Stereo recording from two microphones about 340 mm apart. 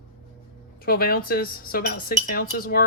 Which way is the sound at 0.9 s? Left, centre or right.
Left.